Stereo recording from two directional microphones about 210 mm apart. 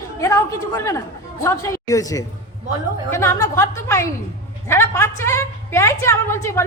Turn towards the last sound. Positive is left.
turn(degrees=10)  # may be behind; listen again after turning